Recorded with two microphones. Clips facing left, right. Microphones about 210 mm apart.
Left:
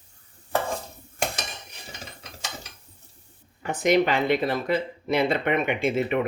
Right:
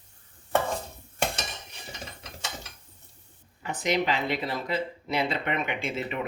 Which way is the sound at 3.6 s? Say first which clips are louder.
Left 6 dB; 50° left (ahead or behind).